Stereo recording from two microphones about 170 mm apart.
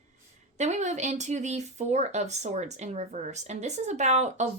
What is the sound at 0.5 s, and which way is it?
Speech, 45° right (ahead or behind).